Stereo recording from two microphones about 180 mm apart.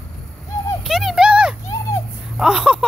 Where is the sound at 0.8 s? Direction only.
Centre (ahead or behind).